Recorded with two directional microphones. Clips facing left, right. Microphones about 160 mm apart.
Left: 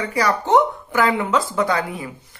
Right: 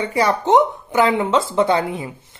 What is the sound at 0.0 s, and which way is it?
Speech, 25° right (ahead or behind).